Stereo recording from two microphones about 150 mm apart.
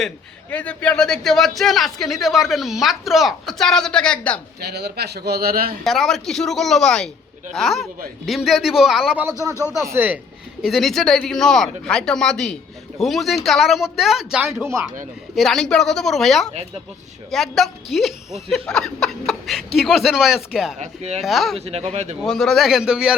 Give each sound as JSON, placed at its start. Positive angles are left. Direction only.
{"t": 0.5, "sound": "a man's voice", "side_deg": 10}
{"t": 4.6, "sound": "a man's voice", "side_deg": -90}
{"t": 5.8, "sound": "a man's voice", "side_deg": 0}
{"t": 9.7, "sound": "speech", "side_deg": -15}
{"t": 10.6, "sound": "a man's voice", "side_deg": 0}
{"t": 14.4, "sound": "speech", "side_deg": -15}
{"t": 15.4, "sound": "a man's voice", "side_deg": 0}
{"t": 20.7, "sound": "speech", "side_deg": -50}
{"t": 21.2, "sound": "a man's voice", "side_deg": 0}
{"t": 21.6, "sound": "speech", "side_deg": -45}
{"t": 22.2, "sound": "a man's voice", "side_deg": 5}